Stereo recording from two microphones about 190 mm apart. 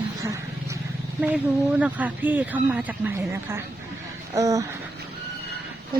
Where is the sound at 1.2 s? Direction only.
5° right (ahead or behind).